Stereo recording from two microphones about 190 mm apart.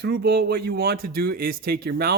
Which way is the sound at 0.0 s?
60° right (ahead or behind).